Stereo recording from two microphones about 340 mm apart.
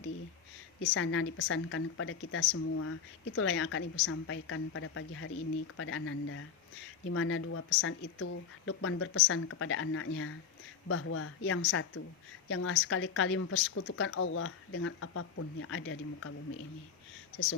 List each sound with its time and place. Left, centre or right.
0.8 s speech: left